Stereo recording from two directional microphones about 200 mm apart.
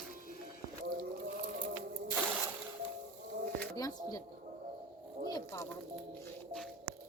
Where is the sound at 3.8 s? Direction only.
20° left (ahead or behind).